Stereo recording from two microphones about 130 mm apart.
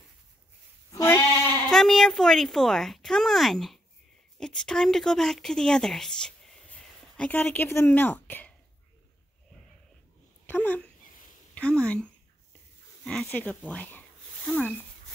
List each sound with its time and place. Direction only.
1.0 s bleat: 15° left (ahead or behind)
1.7 s speech: 5° left (ahead or behind)
10.4 s speech: 15° left (ahead or behind)